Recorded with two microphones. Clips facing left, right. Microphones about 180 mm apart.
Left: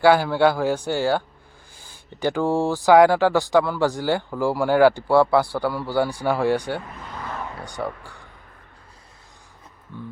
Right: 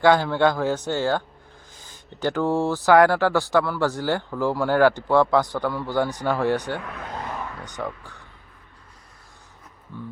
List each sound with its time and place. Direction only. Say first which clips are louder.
0.0 s speech: left 2 dB; 10° left (ahead or behind)
6.8 s vehicle: right 4 dB; 75° right (ahead or behind)
7.6 s speech: left 2 dB; 10° left (ahead or behind)
9.9 s speech: even; 15° left (ahead or behind)